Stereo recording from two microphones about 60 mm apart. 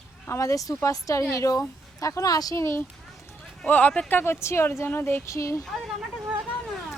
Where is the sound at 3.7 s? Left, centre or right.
Left.